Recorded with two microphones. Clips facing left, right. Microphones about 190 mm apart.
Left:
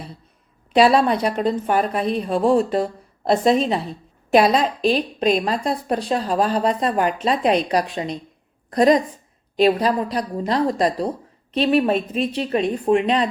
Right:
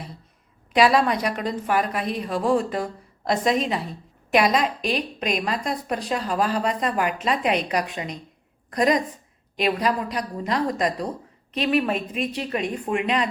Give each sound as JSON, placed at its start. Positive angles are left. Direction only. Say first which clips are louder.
{"t": 0.7, "sound": "a woman's voice", "louder": "left 3 dB", "side_deg": 30}